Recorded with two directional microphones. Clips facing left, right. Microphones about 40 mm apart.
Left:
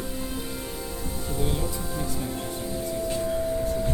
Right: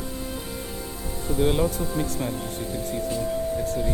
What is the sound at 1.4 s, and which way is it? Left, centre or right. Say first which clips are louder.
Speech: right 8 dB; right.